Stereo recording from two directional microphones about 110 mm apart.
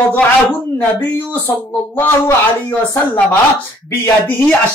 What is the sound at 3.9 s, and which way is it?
Speech, 20° left (ahead or behind).